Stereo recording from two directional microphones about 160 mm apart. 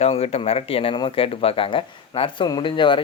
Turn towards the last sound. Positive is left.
turn(degrees=30)  # may be behind; listen again after turning